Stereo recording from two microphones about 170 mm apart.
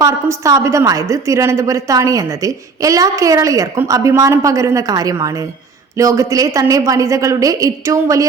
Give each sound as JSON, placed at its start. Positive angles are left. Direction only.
{"t": 0.0, "sound": "a woman's voice", "side_deg": -20}